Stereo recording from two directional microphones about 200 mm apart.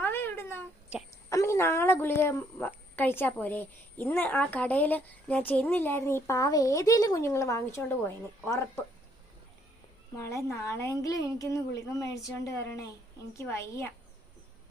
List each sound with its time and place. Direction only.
0.0 s cat: 10° left (ahead or behind)
1.3 s a woman's voice: 15° left (ahead or behind)
10.2 s a woman's voice: 15° left (ahead or behind)